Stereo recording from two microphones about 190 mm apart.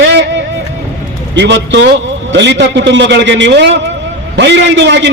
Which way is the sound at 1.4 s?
65° right (ahead or behind).